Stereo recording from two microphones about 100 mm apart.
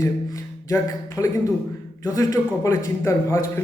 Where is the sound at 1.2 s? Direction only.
25° left (ahead or behind).